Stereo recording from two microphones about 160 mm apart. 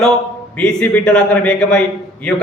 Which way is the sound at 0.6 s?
5° left (ahead or behind).